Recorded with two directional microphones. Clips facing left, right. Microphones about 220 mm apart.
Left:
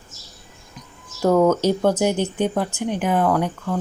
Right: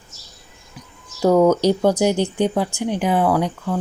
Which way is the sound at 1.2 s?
10° right (ahead or behind).